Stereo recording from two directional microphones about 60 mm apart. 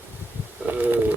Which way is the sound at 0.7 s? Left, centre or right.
Right.